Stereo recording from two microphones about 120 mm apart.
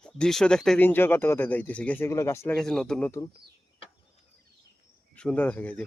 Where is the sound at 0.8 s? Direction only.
15° left (ahead or behind).